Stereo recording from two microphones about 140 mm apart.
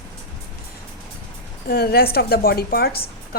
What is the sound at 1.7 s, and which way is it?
A woman's voice, 90° left.